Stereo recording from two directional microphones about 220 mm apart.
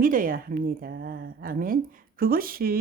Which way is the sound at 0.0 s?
40° right (ahead or behind).